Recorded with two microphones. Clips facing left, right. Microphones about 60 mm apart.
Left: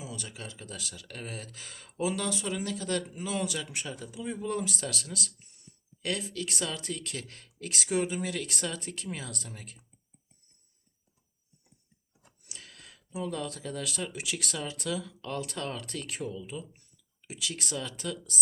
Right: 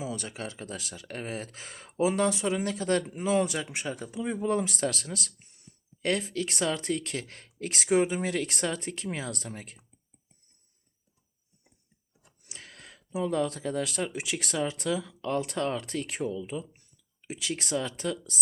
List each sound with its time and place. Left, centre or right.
0.0 s speech: right
12.5 s speech: right